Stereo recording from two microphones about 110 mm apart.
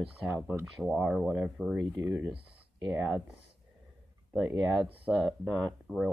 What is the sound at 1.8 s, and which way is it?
Speech, 20° right (ahead or behind).